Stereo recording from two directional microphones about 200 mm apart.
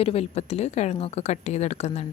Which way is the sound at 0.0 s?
30° left (ahead or behind).